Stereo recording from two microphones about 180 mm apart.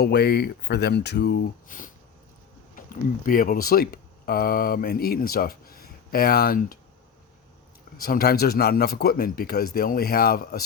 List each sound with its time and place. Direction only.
0.0 s speech: 65° left (ahead or behind)
8.0 s speech: 55° left (ahead or behind)